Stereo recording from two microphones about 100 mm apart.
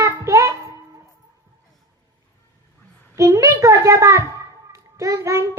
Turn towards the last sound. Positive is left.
turn(degrees=-30)  # may be behind; listen again after turning